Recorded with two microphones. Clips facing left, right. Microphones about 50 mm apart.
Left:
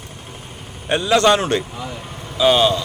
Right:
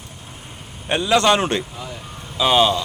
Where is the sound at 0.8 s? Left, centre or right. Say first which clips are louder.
Left 2 dB; centre.